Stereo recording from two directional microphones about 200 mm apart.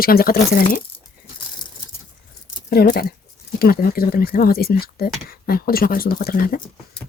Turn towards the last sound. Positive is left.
turn(degrees=45)  # may be behind; listen again after turning